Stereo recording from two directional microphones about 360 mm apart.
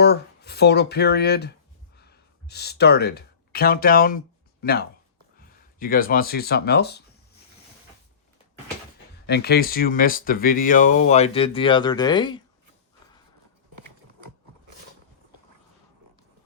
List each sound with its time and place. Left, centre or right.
0.0 s speech: left
9.2 s speech: left